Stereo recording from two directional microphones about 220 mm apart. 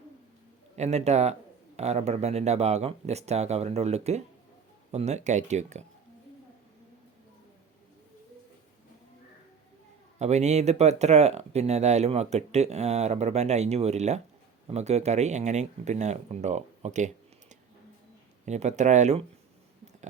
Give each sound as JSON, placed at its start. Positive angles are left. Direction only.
{"t": 0.8, "sound": "speech", "side_deg": -30}
{"t": 10.2, "sound": "speech", "side_deg": -30}
{"t": 18.4, "sound": "speech", "side_deg": -30}